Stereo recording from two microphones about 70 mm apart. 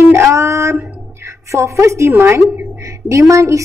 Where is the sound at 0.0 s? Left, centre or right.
Right.